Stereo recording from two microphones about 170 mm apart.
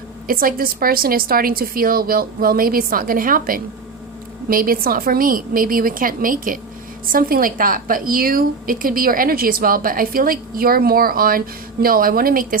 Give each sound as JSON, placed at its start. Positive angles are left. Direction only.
{"t": 0.3, "sound": "a woman's voice", "side_deg": -60}